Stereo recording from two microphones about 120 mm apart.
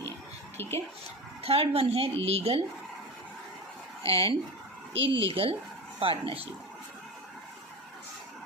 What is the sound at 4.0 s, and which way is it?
Speech, 50° right (ahead or behind).